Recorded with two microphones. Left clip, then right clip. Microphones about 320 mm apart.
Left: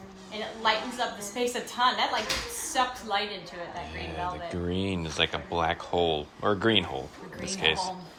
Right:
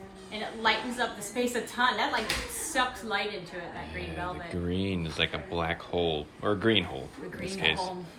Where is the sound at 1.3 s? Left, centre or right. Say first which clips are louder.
Even; centre.